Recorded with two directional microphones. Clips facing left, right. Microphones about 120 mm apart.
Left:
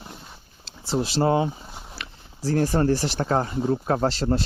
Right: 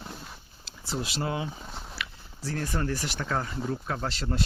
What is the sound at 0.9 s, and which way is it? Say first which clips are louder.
Speech: left 10 dB; 35° left (ahead or behind).